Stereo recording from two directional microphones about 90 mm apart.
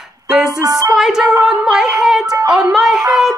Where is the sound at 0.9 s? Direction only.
5° right (ahead or behind).